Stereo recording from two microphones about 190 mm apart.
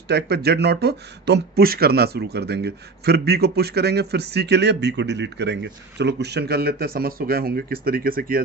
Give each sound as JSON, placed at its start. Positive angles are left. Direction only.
{"t": 0.1, "sound": "speech", "side_deg": -60}